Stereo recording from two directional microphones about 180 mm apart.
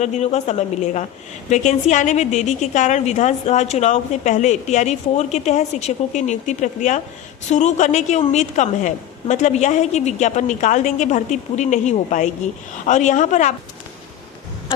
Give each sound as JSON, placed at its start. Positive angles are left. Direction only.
{"t": 0.0, "sound": "a woman's voice", "side_deg": 40}